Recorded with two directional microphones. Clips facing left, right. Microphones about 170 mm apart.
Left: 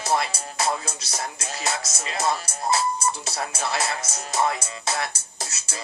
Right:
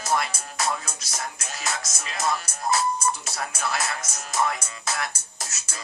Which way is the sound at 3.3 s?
30° left (ahead or behind).